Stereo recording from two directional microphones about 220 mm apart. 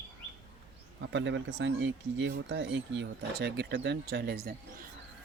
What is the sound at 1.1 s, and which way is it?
Speech, 55° right (ahead or behind).